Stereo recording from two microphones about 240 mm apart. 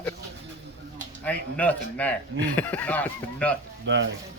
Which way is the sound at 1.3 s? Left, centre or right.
Centre.